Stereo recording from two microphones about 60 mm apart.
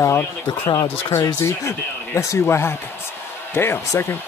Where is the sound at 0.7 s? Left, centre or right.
Left.